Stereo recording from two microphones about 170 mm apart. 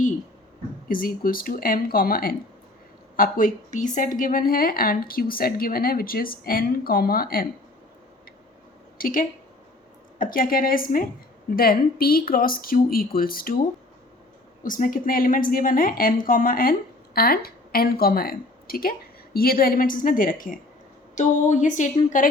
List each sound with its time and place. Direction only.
0.9 s a woman's voice: 55° left (ahead or behind)
9.0 s a woman's voice: 55° left (ahead or behind)
14.6 s a woman's voice: 50° left (ahead or behind)